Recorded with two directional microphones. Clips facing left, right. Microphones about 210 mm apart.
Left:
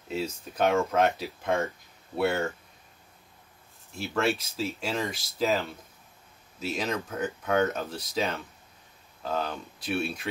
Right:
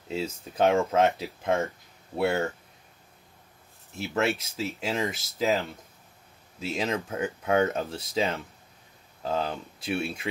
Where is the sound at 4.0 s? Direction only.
20° right (ahead or behind).